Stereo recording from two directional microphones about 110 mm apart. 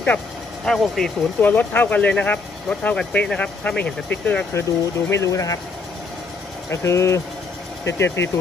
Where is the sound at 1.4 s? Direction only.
15° left (ahead or behind).